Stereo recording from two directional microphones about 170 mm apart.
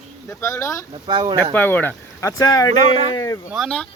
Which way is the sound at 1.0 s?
25° right (ahead or behind).